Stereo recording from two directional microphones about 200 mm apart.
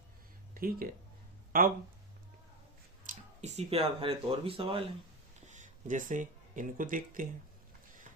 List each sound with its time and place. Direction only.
0.5 s speech: 45° right (ahead or behind)
3.0 s speech: 35° right (ahead or behind)
5.5 s speech: 40° right (ahead or behind)